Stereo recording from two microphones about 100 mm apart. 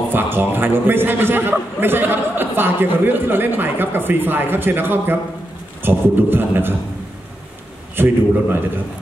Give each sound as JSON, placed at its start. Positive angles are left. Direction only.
{"t": 0.1, "sound": "a man's voice", "side_deg": -20}
{"t": 7.9, "sound": "a man's voice", "side_deg": -20}